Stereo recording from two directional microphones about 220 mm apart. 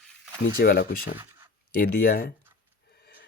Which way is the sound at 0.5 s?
45° left (ahead or behind).